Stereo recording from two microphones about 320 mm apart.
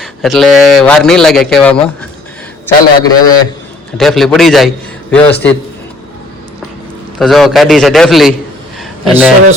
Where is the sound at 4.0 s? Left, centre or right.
Centre.